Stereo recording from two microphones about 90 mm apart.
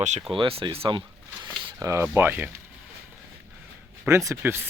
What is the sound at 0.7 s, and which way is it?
Speech, 80° right.